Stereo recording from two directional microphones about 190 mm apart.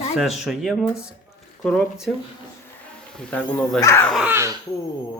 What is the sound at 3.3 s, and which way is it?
Speech, 5° left (ahead or behind).